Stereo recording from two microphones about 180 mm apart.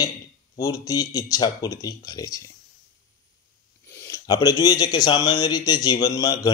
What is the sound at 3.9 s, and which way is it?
Speech, 15° left (ahead or behind).